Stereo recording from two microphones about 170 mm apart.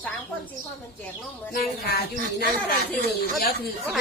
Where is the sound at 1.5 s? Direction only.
60° left (ahead or behind).